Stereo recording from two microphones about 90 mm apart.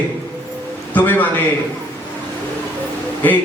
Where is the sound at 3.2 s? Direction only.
20° left (ahead or behind).